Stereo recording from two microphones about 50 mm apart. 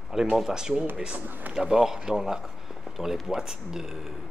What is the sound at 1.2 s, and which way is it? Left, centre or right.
Speech, right.